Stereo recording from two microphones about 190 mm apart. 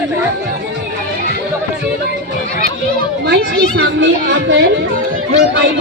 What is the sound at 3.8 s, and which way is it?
Speech, 75° right (ahead or behind).